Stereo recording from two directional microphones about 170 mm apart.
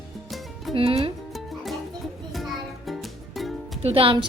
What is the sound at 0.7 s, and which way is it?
Speech, 35° right (ahead or behind).